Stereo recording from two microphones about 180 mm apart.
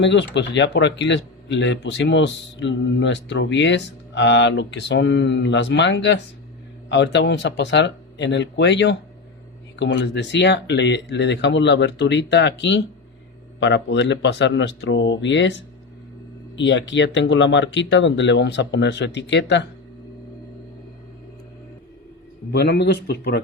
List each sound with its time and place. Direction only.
0.0 s speech: 80° left
16.6 s speech: 85° left
22.5 s speech: 65° left (ahead or behind)